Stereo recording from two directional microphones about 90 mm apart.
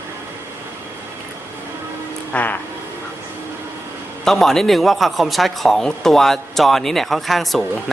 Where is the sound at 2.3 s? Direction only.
20° left (ahead or behind).